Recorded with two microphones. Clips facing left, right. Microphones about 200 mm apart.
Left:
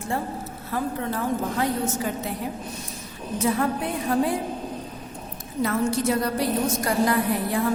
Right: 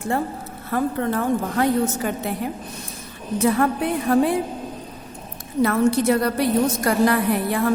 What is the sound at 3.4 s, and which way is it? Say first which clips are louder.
Speech: right 4 dB; 60° right (ahead or behind).